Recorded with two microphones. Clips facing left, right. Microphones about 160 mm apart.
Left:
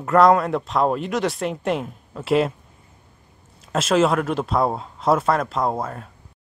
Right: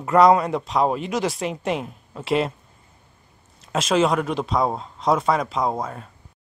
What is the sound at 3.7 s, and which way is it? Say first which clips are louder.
Speech: left 1 dB; centre (ahead or behind).